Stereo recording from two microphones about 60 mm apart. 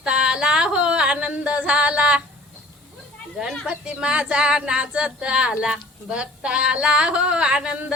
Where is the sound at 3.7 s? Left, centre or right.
Centre.